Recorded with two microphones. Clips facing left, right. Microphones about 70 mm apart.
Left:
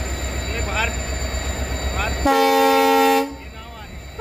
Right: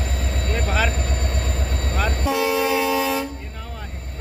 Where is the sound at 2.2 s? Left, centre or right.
Left.